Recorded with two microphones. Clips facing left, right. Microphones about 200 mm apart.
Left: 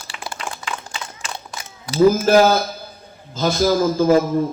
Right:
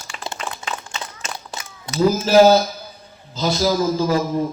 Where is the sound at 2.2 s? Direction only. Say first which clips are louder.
Right 2 dB; 55° left (ahead or behind).